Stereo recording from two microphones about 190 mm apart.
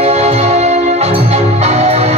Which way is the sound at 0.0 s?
35° right (ahead or behind).